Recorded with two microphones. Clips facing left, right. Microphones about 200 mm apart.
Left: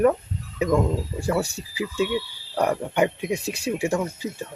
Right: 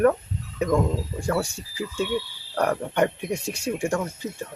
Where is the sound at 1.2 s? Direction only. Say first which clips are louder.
Left 1 dB; 5° left (ahead or behind).